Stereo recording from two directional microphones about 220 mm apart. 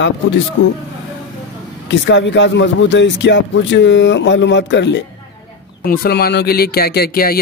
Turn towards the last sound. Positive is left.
turn(degrees=45)  # may be behind; listen again after turning